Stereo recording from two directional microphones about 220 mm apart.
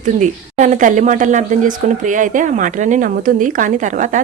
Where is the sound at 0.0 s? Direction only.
35° right (ahead or behind).